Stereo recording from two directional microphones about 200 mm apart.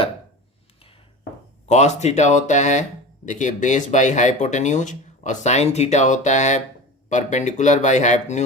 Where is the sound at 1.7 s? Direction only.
35° left (ahead or behind).